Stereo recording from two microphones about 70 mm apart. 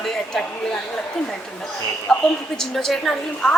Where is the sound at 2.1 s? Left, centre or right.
Centre.